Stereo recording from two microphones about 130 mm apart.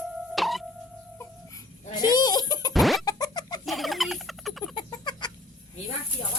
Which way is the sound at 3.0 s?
30° left (ahead or behind).